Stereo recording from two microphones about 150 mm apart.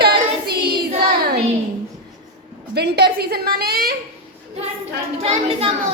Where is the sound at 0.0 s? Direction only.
90° right.